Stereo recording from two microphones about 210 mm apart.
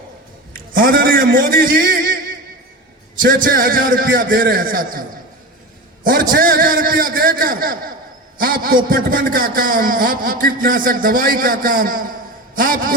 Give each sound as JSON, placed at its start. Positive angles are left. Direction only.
{"t": 0.5, "sound": "a man's voice", "side_deg": -40}
{"t": 3.2, "sound": "a man's voice", "side_deg": -40}
{"t": 6.1, "sound": "a man's voice", "side_deg": -45}